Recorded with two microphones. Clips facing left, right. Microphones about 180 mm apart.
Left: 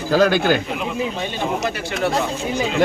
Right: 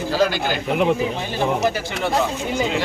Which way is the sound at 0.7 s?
60° right (ahead or behind).